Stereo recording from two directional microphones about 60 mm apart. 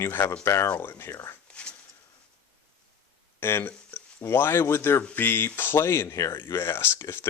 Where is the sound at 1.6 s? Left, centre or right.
Centre.